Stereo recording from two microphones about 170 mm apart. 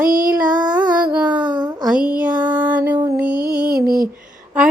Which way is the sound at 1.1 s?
10° right (ahead or behind).